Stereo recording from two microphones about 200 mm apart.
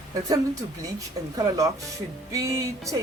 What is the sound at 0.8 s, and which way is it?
Music, 15° right (ahead or behind).